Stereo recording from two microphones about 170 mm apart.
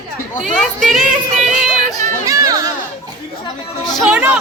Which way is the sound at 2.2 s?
20° right (ahead or behind).